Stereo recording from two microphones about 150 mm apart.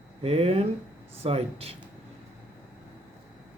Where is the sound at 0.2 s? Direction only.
40° right (ahead or behind).